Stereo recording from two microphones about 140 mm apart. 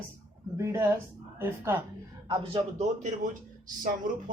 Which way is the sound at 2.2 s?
45° right (ahead or behind).